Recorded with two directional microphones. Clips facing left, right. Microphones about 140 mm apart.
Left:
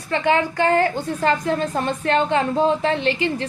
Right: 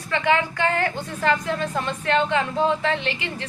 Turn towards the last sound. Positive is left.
turn(degrees=35)  # may be behind; listen again after turning